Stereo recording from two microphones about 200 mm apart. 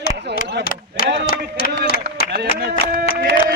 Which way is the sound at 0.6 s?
50° left (ahead or behind).